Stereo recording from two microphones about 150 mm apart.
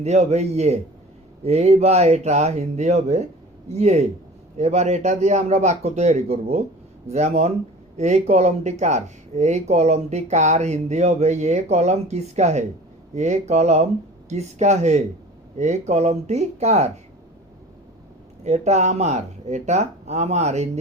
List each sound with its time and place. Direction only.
0.0 s speech: 50° right (ahead or behind)
18.4 s speech: 50° right (ahead or behind)